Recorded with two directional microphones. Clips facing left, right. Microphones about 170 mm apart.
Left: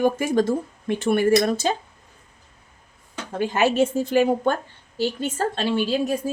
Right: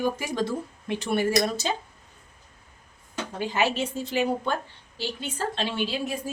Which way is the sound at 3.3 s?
50° left (ahead or behind).